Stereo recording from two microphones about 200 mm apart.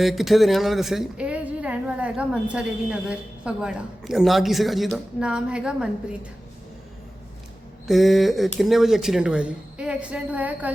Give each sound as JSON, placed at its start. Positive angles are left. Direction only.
{"t": 0.0, "sound": "speech", "side_deg": 0}
{"t": 7.9, "sound": "speech", "side_deg": 0}